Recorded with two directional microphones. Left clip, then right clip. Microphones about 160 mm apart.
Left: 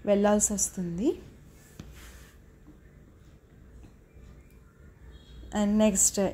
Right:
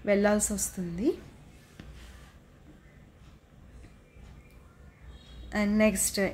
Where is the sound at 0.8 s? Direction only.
15° right (ahead or behind).